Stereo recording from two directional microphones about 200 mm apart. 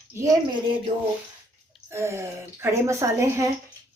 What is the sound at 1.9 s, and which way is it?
Speech, 15° right (ahead or behind).